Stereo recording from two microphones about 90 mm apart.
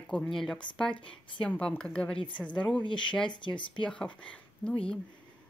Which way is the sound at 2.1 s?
65° left (ahead or behind).